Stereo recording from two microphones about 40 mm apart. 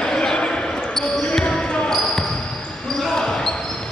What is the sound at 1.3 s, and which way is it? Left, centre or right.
Basketball bounce, left.